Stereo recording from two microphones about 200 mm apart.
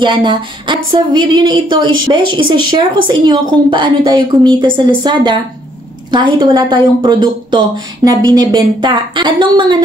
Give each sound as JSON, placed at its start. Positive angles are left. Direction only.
{"t": 0.0, "sound": "speech", "side_deg": -25}